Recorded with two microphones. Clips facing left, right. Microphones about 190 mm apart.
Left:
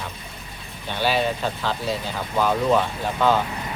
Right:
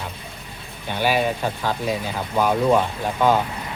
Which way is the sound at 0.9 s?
10° right (ahead or behind).